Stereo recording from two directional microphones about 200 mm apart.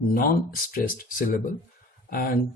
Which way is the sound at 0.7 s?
45° left (ahead or behind).